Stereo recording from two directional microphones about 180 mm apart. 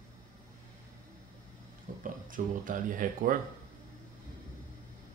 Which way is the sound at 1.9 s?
50° right (ahead or behind).